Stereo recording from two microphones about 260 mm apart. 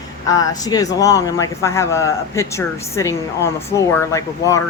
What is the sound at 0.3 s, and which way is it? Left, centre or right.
Speech, centre.